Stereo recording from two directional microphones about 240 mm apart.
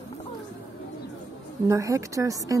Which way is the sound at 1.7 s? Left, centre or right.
Centre.